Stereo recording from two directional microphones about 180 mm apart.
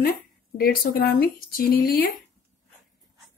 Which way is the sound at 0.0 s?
55° left (ahead or behind).